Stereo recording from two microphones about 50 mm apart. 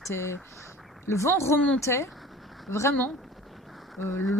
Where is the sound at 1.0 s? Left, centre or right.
Left.